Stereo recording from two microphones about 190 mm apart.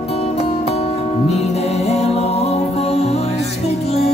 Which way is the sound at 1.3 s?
35° left (ahead or behind).